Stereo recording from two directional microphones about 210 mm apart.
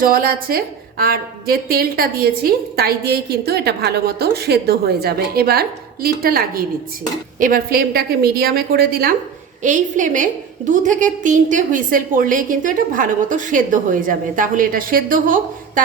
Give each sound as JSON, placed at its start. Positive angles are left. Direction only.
{"t": 0.0, "sound": "a woman's voice", "side_deg": -45}